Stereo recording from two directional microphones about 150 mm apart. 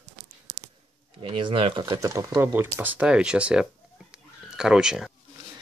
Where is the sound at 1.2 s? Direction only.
35° right (ahead or behind).